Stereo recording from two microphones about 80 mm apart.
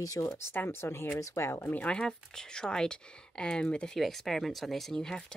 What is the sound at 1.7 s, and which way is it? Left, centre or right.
Speech, centre.